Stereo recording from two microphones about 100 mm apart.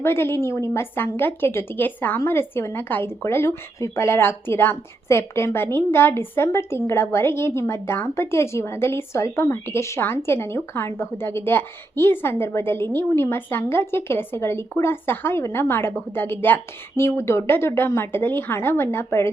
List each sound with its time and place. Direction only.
0.0 s a woman's voice: 25° left (ahead or behind)